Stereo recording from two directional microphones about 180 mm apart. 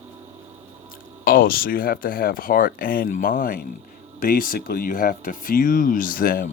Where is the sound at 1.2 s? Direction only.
55° left (ahead or behind).